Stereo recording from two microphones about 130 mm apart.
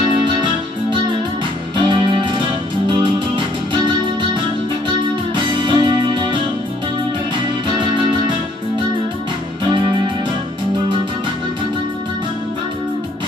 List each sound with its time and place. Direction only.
1.8 s music: 35° right (ahead or behind)
5.3 s music: 35° right (ahead or behind)
9.7 s music: 40° right (ahead or behind)